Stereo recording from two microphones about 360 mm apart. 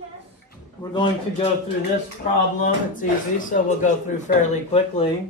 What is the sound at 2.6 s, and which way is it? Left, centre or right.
Speech, left.